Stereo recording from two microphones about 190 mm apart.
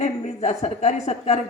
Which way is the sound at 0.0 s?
35° left (ahead or behind).